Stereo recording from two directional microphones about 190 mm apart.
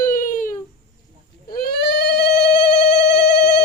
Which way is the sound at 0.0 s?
45° left (ahead or behind).